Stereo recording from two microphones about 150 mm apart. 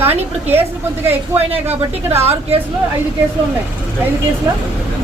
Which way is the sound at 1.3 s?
45° right (ahead or behind).